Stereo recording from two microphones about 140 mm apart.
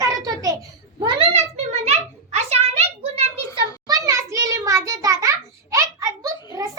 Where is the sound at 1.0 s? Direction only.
40° right (ahead or behind).